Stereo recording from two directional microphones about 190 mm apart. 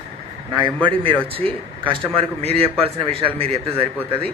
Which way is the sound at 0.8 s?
30° right (ahead or behind).